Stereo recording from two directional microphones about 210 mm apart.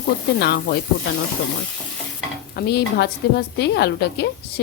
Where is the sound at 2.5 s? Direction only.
50° left (ahead or behind).